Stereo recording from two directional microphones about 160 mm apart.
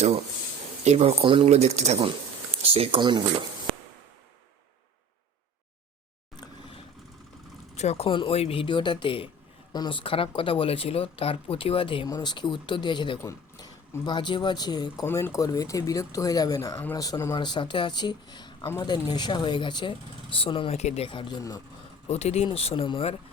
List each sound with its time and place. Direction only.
0.9 s speech: 40° right (ahead or behind)
6.3 s a sound: 30° left (ahead or behind)
7.8 s speech: 40° left (ahead or behind)
15.0 s speech: 15° left (ahead or behind)
22.1 s speech: 40° left (ahead or behind)